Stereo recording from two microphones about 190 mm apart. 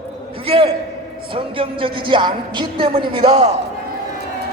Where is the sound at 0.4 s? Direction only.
30° right (ahead or behind).